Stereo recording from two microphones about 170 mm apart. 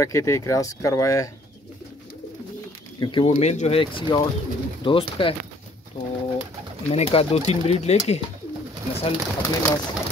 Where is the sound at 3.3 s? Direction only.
40° left (ahead or behind).